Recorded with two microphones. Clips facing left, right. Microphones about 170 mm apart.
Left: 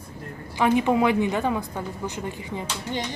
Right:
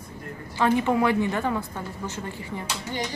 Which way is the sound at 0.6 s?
15° left (ahead or behind).